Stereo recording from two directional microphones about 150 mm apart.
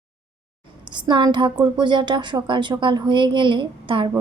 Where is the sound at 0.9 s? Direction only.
30° right (ahead or behind).